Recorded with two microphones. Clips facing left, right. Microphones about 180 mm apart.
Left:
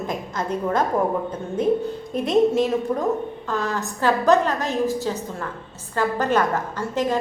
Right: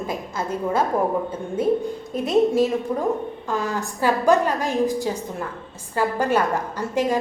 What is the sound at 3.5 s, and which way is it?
A woman's voice, 10° right (ahead or behind).